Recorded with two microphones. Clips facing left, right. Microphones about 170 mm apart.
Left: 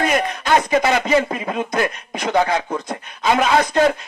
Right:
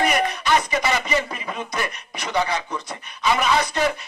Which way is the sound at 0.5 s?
50° left (ahead or behind).